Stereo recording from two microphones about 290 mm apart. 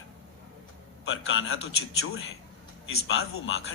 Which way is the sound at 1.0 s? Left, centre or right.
Left.